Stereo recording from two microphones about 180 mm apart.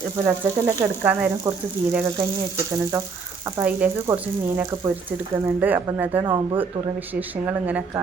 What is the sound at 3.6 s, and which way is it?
Speech, 10° right (ahead or behind).